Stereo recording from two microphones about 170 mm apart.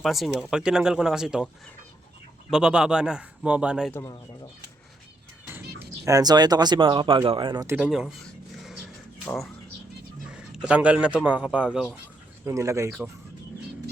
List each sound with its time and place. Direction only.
0.0 s speech: centre (ahead or behind)
2.5 s speech: 5° right (ahead or behind)
3.9 s speech: 15° left (ahead or behind)
5.8 s speech: 20° right (ahead or behind)
7.8 s speech: 5° right (ahead or behind)
9.2 s speech: 5° left (ahead or behind)
10.3 s speech: 5° right (ahead or behind)
12.5 s speech: 15° right (ahead or behind)